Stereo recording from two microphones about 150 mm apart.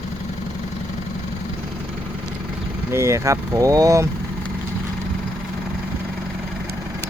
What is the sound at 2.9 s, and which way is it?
Speech, 20° right (ahead or behind).